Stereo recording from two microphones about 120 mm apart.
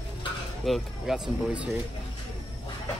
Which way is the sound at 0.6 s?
Centre (ahead or behind).